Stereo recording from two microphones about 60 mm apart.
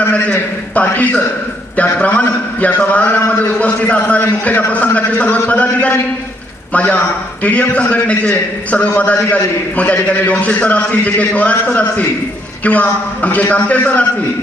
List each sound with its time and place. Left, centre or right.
0.0 s a man's voice: left